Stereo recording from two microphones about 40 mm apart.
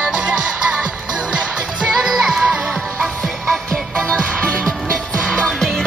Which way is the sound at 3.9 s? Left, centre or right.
Left.